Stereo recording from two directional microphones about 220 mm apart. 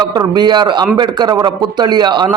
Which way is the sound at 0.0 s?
20° right (ahead or behind).